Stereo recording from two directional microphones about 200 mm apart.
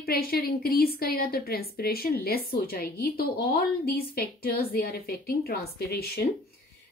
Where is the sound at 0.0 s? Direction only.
50° left (ahead or behind).